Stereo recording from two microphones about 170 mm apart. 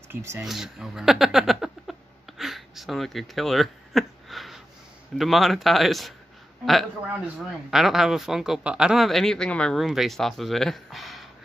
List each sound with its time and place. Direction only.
0.1 s speech: 15° right (ahead or behind)
0.4 s a sound: centre (ahead or behind)
5.1 s speech: centre (ahead or behind)